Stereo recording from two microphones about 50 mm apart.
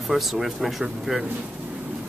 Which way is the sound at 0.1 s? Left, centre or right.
Centre.